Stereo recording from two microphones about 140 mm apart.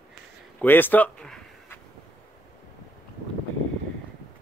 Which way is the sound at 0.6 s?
15° left (ahead or behind).